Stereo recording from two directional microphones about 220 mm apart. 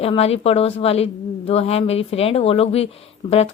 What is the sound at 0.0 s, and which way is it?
A woman's voice, 25° left (ahead or behind).